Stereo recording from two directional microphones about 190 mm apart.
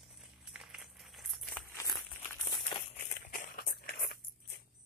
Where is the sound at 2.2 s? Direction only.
10° left (ahead or behind).